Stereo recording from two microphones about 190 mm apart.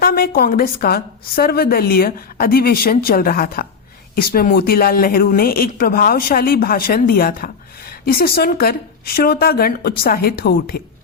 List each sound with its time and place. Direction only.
0.0 s a woman's voice: 50° left (ahead or behind)